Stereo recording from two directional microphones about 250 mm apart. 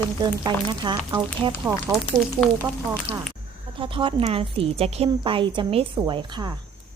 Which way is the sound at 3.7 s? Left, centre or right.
Right.